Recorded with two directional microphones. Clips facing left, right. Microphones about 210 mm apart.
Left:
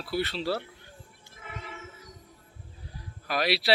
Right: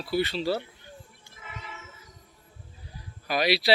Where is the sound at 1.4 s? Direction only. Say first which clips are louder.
Left 2 dB; 50° left (ahead or behind).